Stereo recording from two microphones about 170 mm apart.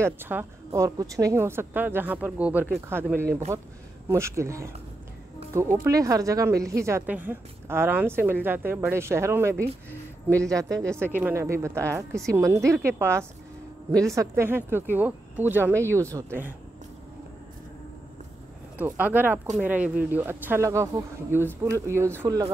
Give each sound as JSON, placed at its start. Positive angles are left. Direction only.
{"t": 0.0, "sound": "speech", "side_deg": -10}
{"t": 9.6, "sound": "speech", "side_deg": 10}
{"t": 10.5, "sound": "speech", "side_deg": -20}
{"t": 18.8, "sound": "speech", "side_deg": -10}